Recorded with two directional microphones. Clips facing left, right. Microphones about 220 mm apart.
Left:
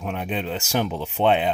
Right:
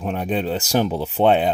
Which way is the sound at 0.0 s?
35° right (ahead or behind).